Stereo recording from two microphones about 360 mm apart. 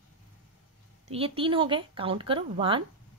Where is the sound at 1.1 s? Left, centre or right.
Centre.